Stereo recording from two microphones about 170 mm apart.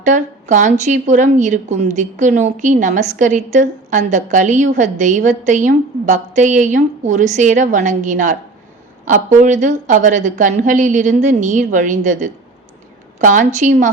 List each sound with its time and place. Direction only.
0.0 s a woman's voice: 45° right (ahead or behind)